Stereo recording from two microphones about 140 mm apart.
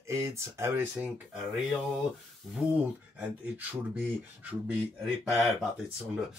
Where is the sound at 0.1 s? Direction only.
20° right (ahead or behind); by 1.8 s 5° right (ahead or behind).